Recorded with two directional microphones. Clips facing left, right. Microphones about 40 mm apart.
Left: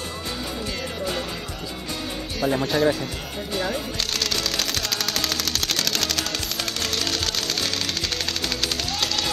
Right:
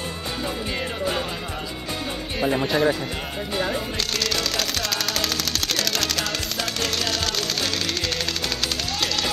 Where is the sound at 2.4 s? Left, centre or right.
Centre.